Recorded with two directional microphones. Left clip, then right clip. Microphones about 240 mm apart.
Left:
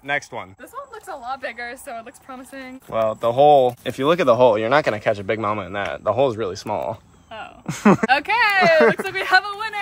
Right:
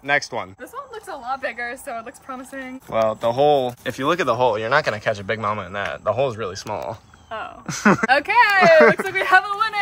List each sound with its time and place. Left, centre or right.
0.0 s speech: centre
7.2 s a sound: centre
7.6 s speech: centre
8.1 s a woman's voice: centre